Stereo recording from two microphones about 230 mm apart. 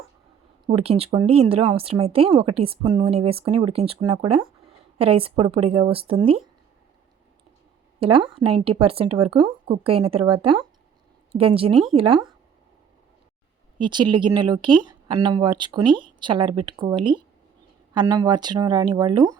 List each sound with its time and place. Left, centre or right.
0.7 s a woman's voice: right
7.9 s a woman's voice: right
11.7 s speech: centre
11.9 s a woman's voice: right
13.7 s a woman's voice: centre